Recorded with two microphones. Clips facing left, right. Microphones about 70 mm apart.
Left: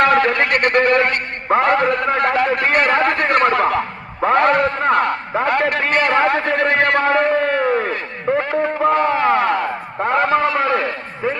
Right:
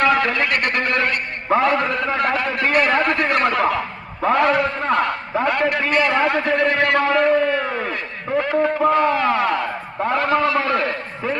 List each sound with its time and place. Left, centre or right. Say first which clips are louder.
0.1 s speech: left 3 dB; left
0.9 s a man's voice: left 5 dB; left
1.1 s a man's voice: left 2 dB; left
6.2 s a man's voice: left 2 dB; left
6.5 s a man's voice: left 1 dB; left
8.3 s a man's voice: left 3 dB; left
8.8 s a man's voice: left 3 dB; left